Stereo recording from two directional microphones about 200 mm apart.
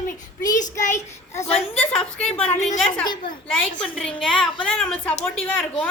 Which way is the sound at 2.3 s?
35° left (ahead or behind).